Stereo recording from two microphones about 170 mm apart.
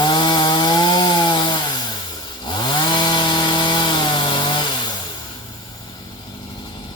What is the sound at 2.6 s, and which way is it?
Chainsaw, 25° left (ahead or behind).